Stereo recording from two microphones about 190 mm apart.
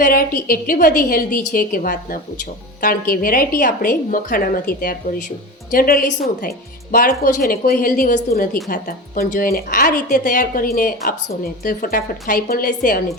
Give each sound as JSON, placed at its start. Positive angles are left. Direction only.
{"t": 0.0, "sound": "a woman's voice", "side_deg": 50}